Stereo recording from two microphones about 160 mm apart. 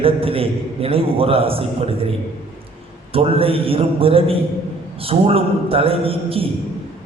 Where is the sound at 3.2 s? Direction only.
35° right (ahead or behind).